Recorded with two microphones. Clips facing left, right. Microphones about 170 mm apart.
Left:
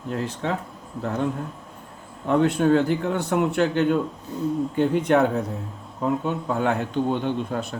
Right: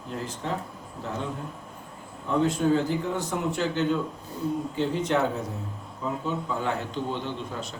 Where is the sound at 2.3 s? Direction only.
65° left (ahead or behind).